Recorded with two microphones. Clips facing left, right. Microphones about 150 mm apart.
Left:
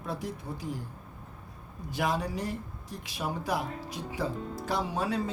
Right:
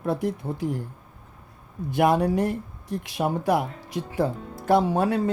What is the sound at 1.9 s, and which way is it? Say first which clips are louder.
Speech: right 10 dB; 60° right (ahead or behind).